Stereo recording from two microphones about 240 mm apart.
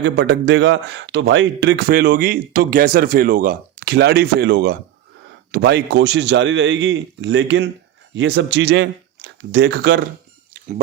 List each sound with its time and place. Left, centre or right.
0.0 s a man's voice: right